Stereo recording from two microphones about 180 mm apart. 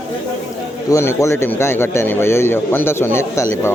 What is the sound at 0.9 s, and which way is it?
Speech, 15° left (ahead or behind).